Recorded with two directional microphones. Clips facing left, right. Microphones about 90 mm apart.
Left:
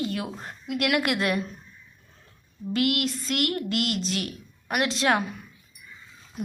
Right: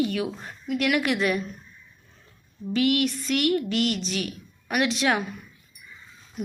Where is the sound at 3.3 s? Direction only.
40° left (ahead or behind).